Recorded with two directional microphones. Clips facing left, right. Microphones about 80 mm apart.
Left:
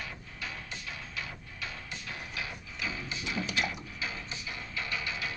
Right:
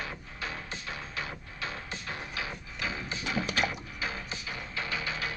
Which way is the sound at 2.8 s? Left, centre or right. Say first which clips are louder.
Right 2 dB; right.